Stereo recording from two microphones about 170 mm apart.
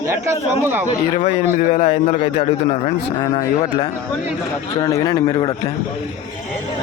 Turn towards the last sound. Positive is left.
turn(degrees=20)  # may be behind; listen again after turning